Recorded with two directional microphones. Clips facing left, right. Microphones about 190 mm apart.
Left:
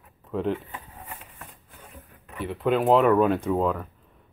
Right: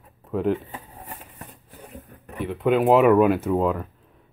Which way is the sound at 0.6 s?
25° right (ahead or behind).